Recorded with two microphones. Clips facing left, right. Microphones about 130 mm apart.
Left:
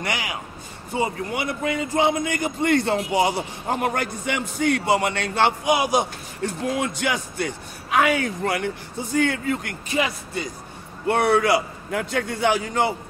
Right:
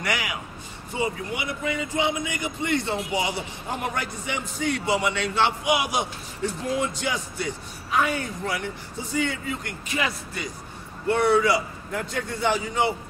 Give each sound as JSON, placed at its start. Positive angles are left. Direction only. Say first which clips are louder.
{"t": 0.0, "sound": "speech", "louder": "left 1 dB", "side_deg": 30}
{"t": 0.9, "sound": "speech", "louder": "left 3 dB", "side_deg": 40}
{"t": 5.8, "sound": "speech", "louder": "left 5 dB", "side_deg": 40}
{"t": 6.4, "sound": "a man's voice", "louder": "left 1 dB", "side_deg": 65}
{"t": 9.9, "sound": "speech", "louder": "left 4 dB", "side_deg": 25}
{"t": 11.1, "sound": "a man's voice", "louder": "left 2 dB", "side_deg": 60}